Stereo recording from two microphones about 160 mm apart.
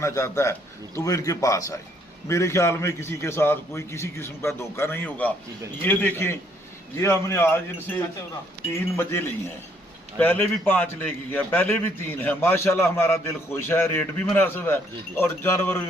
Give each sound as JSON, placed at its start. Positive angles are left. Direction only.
{"t": 0.0, "sound": "a man's voice", "side_deg": 20}